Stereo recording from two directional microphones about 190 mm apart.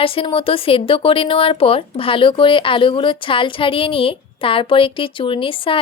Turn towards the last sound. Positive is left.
turn(degrees=30)  # may be behind; listen again after turning